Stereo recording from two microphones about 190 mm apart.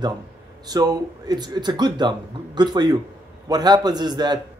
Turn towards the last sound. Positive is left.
turn(degrees=-20)  # may be behind; listen again after turning